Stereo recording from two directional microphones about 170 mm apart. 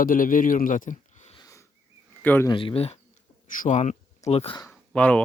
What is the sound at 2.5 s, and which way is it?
Speech, 30° left (ahead or behind).